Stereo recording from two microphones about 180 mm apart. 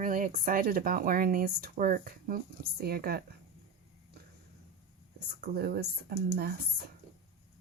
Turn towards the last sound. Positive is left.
turn(degrees=-60)  # may be behind; listen again after turning